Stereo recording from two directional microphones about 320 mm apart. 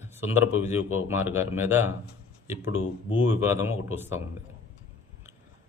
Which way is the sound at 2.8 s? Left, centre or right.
Left.